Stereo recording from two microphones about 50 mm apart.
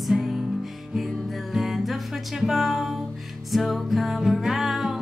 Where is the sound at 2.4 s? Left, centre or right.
Centre.